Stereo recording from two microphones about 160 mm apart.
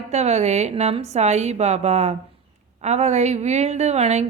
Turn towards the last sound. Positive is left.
turn(degrees=-45)  # may be behind; listen again after turning